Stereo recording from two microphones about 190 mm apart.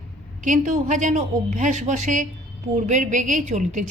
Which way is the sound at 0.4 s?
40° right (ahead or behind).